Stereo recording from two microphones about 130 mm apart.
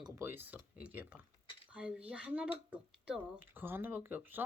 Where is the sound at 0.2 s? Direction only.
15° right (ahead or behind).